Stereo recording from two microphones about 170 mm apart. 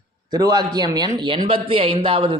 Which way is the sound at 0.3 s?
25° right (ahead or behind).